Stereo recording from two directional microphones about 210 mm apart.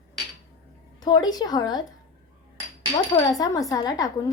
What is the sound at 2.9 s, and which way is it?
Speech, 20° left (ahead or behind).